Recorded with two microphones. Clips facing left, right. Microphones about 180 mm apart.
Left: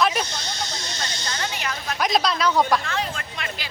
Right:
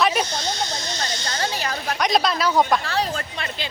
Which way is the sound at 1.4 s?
35° right (ahead or behind).